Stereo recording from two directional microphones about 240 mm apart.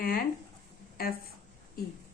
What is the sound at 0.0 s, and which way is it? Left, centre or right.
Speech, left.